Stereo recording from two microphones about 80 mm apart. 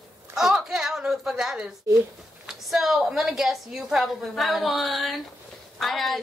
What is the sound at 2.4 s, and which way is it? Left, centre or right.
A woman's voice, centre.